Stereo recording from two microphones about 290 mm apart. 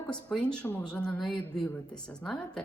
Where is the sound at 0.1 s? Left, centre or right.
Centre.